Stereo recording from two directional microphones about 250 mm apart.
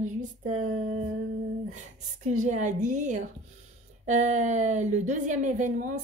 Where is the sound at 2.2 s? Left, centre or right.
Right.